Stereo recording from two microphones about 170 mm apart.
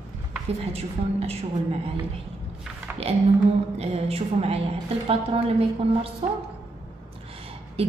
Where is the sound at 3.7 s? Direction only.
35° right (ahead or behind).